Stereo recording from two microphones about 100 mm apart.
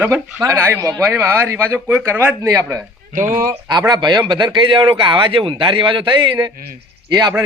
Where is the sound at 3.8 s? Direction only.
45° right (ahead or behind).